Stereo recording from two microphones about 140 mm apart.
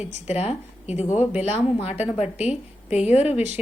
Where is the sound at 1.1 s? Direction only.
10° right (ahead or behind).